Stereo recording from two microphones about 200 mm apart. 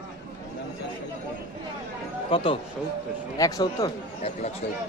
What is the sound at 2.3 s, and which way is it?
A man's voice, 25° left (ahead or behind).